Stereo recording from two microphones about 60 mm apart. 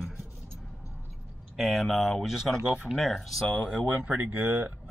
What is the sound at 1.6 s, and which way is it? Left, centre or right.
Speech, centre.